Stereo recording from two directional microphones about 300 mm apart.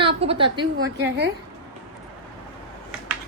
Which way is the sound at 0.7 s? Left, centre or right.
Right.